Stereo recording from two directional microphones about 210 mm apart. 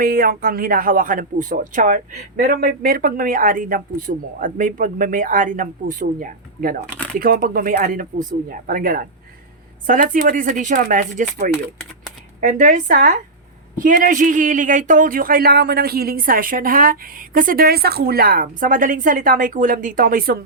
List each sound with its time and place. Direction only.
0.0 s speech: 45° right (ahead or behind)